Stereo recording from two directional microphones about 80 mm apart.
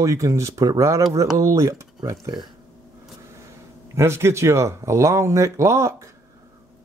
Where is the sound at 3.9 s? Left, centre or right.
Right.